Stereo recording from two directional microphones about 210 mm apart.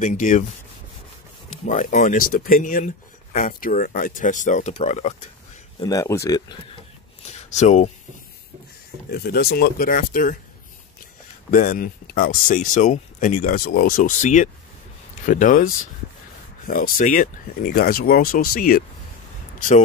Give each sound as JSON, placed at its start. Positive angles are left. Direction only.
{"t": 0.0, "sound": "speech", "side_deg": 35}
{"t": 1.7, "sound": "speech", "side_deg": 35}
{"t": 5.8, "sound": "speech", "side_deg": 20}
{"t": 7.3, "sound": "speech", "side_deg": 35}
{"t": 9.1, "sound": "speech", "side_deg": 50}
{"t": 11.5, "sound": "speech", "side_deg": 40}